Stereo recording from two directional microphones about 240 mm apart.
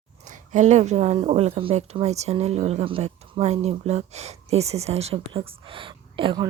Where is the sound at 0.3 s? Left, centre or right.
Right.